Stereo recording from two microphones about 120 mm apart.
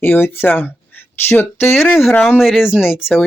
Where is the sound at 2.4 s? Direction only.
5° right (ahead or behind).